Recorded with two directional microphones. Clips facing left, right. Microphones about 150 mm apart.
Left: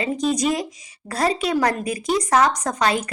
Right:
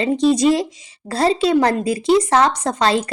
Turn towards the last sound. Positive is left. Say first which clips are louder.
# right 4 dB
turn(degrees=-30)  # may be behind; listen again after turning